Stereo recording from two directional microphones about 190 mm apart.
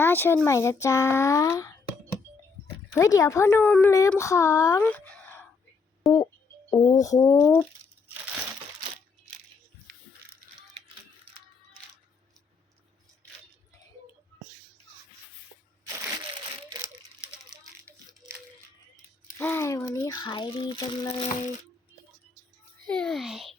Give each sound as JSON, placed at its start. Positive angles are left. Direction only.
{"t": 0.0, "sound": "a woman's voice", "side_deg": 10}
{"t": 2.9, "sound": "a woman's voice", "side_deg": 20}
{"t": 4.8, "sound": "a sound", "side_deg": 10}
{"t": 6.7, "sound": "speech", "side_deg": 20}
{"t": 17.6, "sound": "a sound", "side_deg": -15}
{"t": 19.4, "sound": "speech", "side_deg": 10}
{"t": 22.9, "sound": "a child's voice", "side_deg": 5}